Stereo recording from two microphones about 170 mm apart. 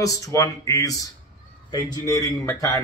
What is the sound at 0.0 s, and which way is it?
A man's voice, 20° left (ahead or behind).